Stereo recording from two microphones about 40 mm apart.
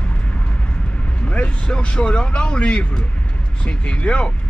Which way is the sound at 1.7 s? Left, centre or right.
Left.